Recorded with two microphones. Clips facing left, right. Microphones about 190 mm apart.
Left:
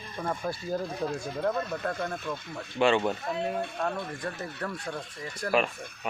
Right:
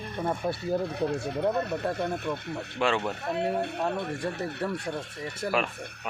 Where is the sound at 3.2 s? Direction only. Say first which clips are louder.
Right 3 dB; 65° right (ahead or behind).